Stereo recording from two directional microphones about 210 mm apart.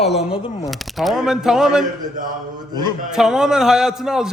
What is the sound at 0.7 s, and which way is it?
A man's voice, centre (ahead or behind).